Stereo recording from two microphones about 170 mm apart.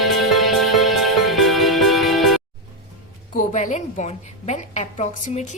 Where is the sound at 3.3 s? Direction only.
45° left (ahead or behind).